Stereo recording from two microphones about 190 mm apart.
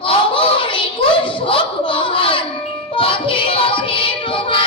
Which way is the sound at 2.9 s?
25° left (ahead or behind).